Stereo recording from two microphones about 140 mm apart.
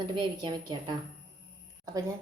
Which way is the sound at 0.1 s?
35° right (ahead or behind).